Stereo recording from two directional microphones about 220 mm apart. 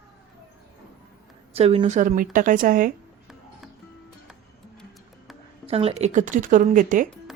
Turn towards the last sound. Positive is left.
turn(degrees=-35)  # may be behind; listen again after turning